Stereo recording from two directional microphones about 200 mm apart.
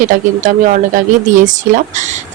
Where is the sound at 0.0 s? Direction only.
40° right (ahead or behind).